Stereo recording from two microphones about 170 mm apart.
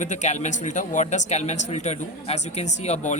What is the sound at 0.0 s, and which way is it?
Speech, 45° left (ahead or behind).